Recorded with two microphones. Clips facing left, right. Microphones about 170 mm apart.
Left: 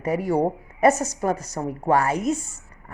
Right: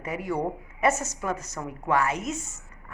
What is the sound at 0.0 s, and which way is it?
A woman's voice, 35° left (ahead or behind).